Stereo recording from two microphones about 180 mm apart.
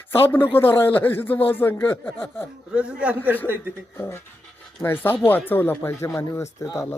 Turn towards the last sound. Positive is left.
turn(degrees=15)  # may be behind; listen again after turning